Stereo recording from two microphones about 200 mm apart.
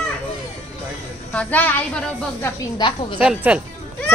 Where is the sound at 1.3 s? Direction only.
10° left (ahead or behind).